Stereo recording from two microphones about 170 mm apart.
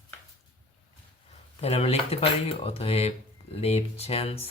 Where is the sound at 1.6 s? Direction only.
35° left (ahead or behind).